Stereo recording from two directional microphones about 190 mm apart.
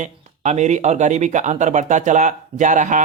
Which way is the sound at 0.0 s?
40° right (ahead or behind).